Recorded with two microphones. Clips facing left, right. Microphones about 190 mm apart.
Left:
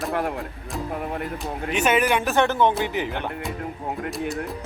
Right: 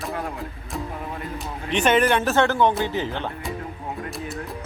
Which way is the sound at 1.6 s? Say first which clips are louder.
Right 2 dB; 5° left (ahead or behind).